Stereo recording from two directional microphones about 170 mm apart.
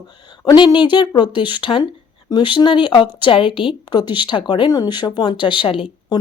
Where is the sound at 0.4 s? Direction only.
25° left (ahead or behind).